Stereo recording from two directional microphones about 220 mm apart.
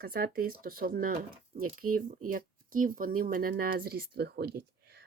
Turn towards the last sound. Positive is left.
turn(degrees=-45)  # may be behind; listen again after turning